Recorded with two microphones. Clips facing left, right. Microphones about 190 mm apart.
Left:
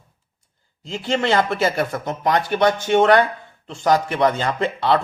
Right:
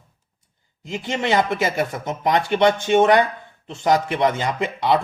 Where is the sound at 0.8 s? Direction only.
20° right (ahead or behind).